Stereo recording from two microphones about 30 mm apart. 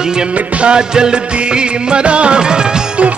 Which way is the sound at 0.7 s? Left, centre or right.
Right.